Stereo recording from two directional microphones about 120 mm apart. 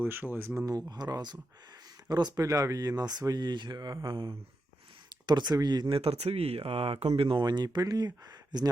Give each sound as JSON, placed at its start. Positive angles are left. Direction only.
{"t": 0.0, "sound": "speech", "side_deg": -15}
{"t": 0.9, "sound": "speech", "side_deg": -35}
{"t": 4.0, "sound": "a sound", "side_deg": -45}
{"t": 5.0, "sound": "speech", "side_deg": -40}
{"t": 6.0, "sound": "speech", "side_deg": -55}
{"t": 7.2, "sound": "speech", "side_deg": -45}